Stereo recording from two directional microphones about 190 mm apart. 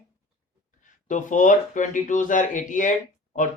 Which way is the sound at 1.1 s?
40° left (ahead or behind).